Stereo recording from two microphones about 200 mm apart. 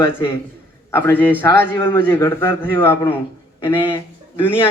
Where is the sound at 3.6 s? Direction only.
25° left (ahead or behind).